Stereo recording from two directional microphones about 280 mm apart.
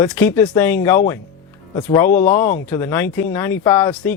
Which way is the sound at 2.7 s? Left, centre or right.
Centre.